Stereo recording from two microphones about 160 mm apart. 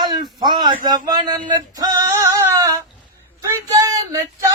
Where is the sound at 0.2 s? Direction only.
25° right (ahead or behind).